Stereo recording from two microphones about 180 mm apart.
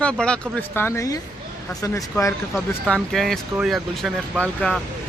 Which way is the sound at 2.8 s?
Centre (ahead or behind).